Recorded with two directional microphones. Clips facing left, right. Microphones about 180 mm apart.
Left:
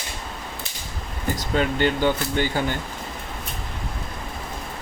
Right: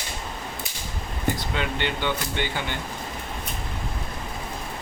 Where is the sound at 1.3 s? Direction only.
40° left (ahead or behind).